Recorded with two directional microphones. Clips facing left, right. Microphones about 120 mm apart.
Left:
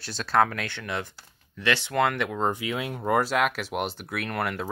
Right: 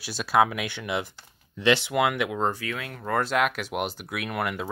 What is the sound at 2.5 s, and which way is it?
Speech, 20° left (ahead or behind).